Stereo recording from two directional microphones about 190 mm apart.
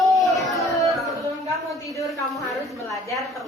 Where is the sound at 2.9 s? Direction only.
15° left (ahead or behind).